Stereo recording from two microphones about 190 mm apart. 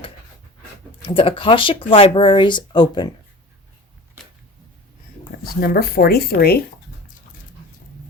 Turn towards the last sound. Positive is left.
turn(degrees=55)  # may be behind; listen again after turning